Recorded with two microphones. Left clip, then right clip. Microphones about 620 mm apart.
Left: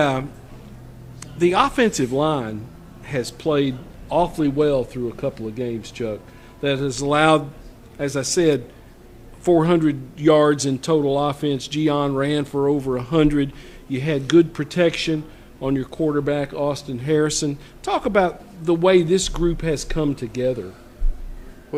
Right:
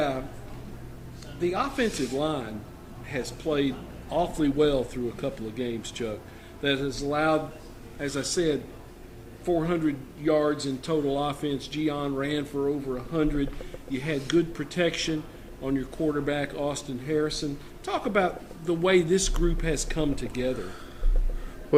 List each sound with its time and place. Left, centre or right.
1.2 s speech: left
6.8 s speech: left
7.9 s speech: left
9.5 s speech: left
21.7 s a sound: right